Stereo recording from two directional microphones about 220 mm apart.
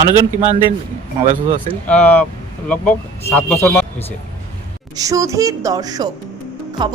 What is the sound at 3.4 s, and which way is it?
Speech, 5° left (ahead or behind).